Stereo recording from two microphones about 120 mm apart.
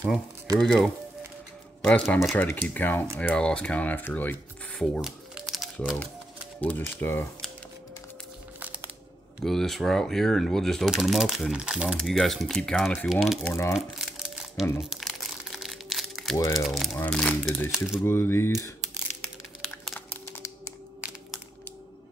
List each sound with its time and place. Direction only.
0.6 s speech: 5° left (ahead or behind)
5.0 s crumpling: centre (ahead or behind)
6.6 s speech: 15° left (ahead or behind)
8.5 s a sound: 15° right (ahead or behind)
9.4 s speech: 5° left (ahead or behind)
13.5 s speech: 20° left (ahead or behind)
13.7 s crumpling: 5° right (ahead or behind)
16.3 s speech: 30° left (ahead or behind)
16.6 s speech: centre (ahead or behind)
17.6 s speech: 5° right (ahead or behind)
18.0 s speech: 20° left (ahead or behind)
19.6 s a sound: centre (ahead or behind)
20.2 s a sound: 20° left (ahead or behind)